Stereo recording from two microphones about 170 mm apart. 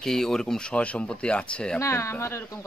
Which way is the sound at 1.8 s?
15° left (ahead or behind).